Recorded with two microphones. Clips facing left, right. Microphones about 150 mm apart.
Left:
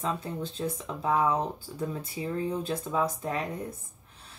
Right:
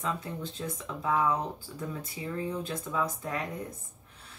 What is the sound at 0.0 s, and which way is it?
Speech, 30° left (ahead or behind).